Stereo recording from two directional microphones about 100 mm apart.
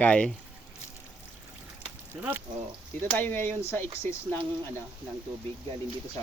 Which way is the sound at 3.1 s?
20° left (ahead or behind).